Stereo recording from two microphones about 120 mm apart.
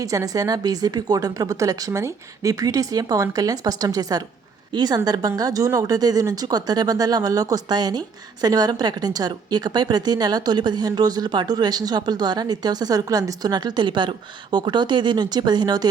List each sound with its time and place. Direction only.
0.0 s speech: 25° right (ahead or behind)